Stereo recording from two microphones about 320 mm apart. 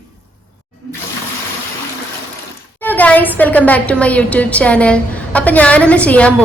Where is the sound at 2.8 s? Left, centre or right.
Centre.